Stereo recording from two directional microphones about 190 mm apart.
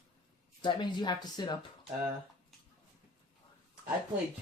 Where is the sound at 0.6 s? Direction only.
25° left (ahead or behind).